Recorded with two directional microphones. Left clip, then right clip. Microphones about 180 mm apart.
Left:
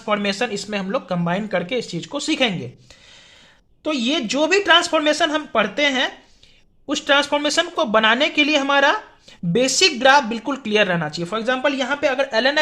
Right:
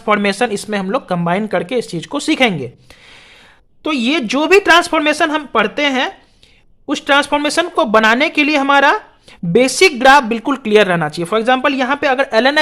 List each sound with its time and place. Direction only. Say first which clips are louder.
0.0 s speech: right 7 dB; 40° right (ahead or behind)
3.8 s speech: right 5 dB; 45° right (ahead or behind)